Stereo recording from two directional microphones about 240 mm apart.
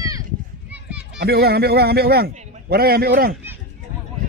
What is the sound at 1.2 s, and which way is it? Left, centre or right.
A man's voice, right.